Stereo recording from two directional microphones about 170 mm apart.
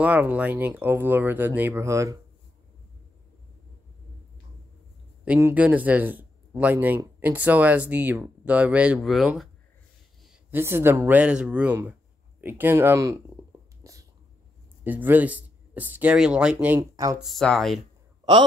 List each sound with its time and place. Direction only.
0.0 s speech: 10° right (ahead or behind)
5.2 s speech: 10° right (ahead or behind)
10.5 s speech: 15° right (ahead or behind)
13.8 s sneeze: 20° right (ahead or behind)
14.8 s speech: 10° right (ahead or behind)
16.9 s speech: 20° right (ahead or behind)
17.2 s speech: centre (ahead or behind)